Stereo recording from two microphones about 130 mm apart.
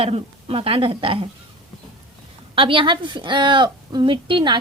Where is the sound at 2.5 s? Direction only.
40° right (ahead or behind).